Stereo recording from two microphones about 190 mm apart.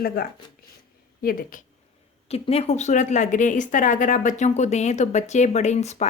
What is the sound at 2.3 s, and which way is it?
A woman's voice, 30° left (ahead or behind).